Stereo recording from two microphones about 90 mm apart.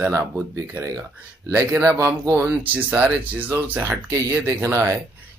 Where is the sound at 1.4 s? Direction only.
30° right (ahead or behind).